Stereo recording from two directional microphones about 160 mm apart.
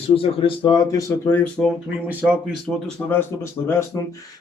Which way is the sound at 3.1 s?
15° left (ahead or behind).